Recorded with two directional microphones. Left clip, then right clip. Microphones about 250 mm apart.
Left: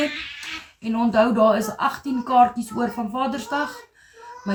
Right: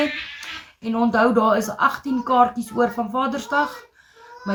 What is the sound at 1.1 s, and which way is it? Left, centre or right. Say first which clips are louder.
Speech: even; centre.